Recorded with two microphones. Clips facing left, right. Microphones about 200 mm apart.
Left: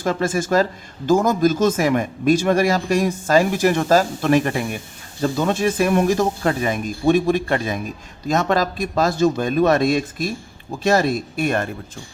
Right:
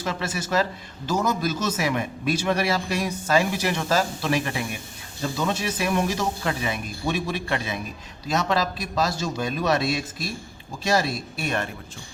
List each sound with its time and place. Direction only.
0.0 s speech: 45° left (ahead or behind)